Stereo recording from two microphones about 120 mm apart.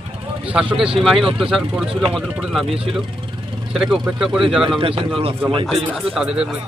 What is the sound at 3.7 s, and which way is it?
Speech, 5° right (ahead or behind).